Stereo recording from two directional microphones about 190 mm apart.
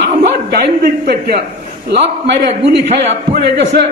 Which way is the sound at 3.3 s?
60° right (ahead or behind).